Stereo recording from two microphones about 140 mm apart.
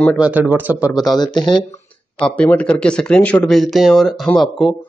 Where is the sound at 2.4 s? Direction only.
10° left (ahead or behind).